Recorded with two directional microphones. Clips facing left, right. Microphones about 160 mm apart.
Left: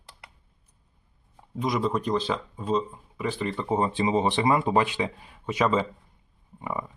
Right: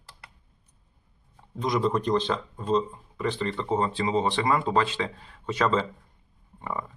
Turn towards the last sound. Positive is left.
turn(degrees=10)  # may be behind; listen again after turning